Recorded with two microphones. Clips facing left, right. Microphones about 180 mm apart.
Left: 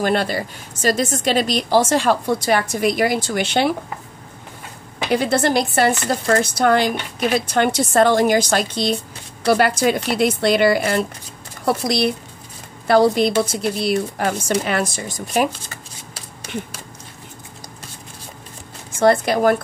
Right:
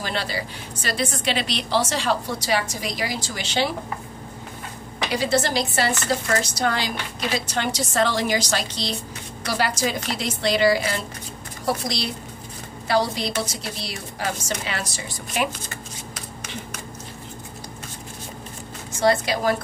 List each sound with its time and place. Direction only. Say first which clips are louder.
0.0 s speech: left 8 dB; 55° left (ahead or behind)
5.1 s speech: left 5 dB; 55° left (ahead or behind)
18.9 s speech: left 5 dB; 55° left (ahead or behind)